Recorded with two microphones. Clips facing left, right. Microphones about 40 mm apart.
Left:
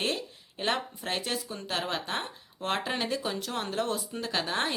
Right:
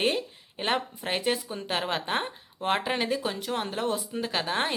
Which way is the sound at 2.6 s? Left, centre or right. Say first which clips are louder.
Right 4 dB; centre.